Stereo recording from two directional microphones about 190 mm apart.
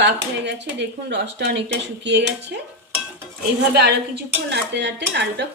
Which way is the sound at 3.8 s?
60° right (ahead or behind).